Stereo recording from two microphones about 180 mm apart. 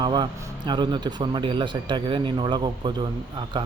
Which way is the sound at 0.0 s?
25° right (ahead or behind).